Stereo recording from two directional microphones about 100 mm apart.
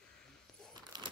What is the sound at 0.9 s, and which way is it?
Crumpling, 45° right (ahead or behind).